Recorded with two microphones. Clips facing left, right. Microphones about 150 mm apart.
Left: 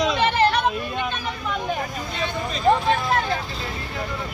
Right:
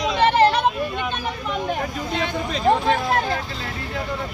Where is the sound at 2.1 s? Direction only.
90° right.